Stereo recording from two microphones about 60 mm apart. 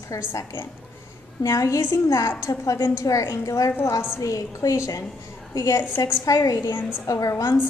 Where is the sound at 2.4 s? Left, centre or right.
Left.